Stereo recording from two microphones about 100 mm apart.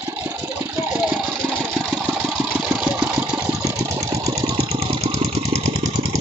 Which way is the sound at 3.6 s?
30° right (ahead or behind).